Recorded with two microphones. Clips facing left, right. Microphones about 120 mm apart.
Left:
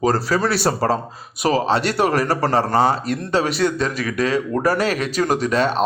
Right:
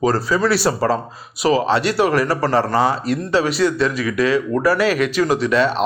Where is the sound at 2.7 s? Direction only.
30° left (ahead or behind).